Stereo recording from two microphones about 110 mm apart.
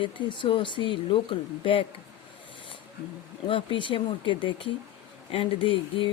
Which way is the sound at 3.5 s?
50° left (ahead or behind).